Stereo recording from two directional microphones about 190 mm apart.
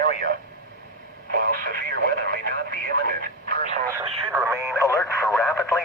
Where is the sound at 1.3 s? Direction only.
50° right (ahead or behind).